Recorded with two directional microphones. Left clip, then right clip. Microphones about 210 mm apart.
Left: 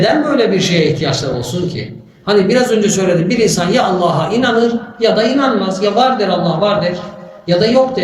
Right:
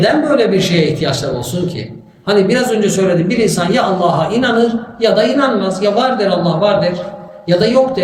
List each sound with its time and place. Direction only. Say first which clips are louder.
0.0 s speech: right 1 dB; 5° right (ahead or behind)
2.2 s a man's voice: left 1 dB; 5° right (ahead or behind)